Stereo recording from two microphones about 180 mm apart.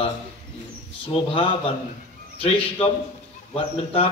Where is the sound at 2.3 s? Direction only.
35° left (ahead or behind).